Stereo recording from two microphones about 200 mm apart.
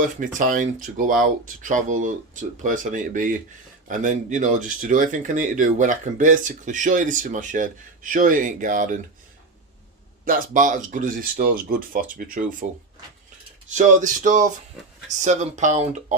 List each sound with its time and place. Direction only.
0.0 s speech: 40° right (ahead or behind)
10.2 s speech: 40° right (ahead or behind)
13.7 s speech: 40° right (ahead or behind)